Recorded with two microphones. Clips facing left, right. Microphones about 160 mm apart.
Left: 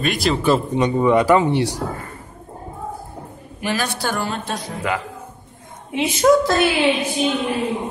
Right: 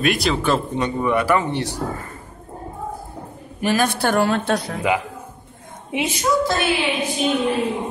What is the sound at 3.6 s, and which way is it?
A woman's voice, 50° right (ahead or behind).